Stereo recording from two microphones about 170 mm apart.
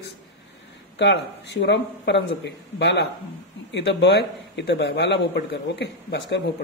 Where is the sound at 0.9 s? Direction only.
90° left; by 6.5 s 70° left (ahead or behind).